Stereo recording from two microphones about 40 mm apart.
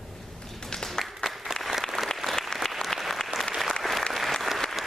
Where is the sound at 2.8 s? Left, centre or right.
Left.